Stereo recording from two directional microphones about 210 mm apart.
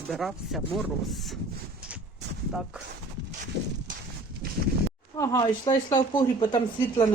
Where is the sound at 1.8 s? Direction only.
5° right (ahead or behind).